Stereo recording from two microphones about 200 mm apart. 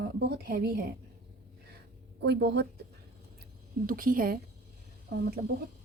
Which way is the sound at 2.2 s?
55° right (ahead or behind).